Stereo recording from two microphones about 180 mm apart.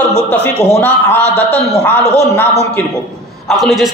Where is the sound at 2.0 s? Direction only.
35° left (ahead or behind).